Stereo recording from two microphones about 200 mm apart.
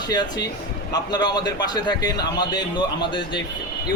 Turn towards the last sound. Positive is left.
turn(degrees=20)  # may be behind; listen again after turning